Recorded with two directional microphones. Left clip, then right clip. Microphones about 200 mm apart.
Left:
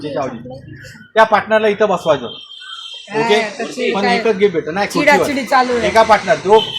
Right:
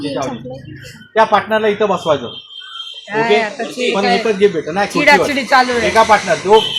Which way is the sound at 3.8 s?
30° left (ahead or behind).